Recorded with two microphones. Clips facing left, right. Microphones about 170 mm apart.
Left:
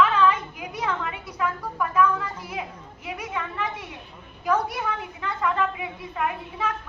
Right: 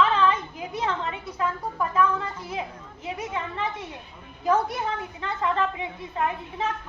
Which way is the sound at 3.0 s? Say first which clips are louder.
Right 1 dB; 25° right (ahead or behind).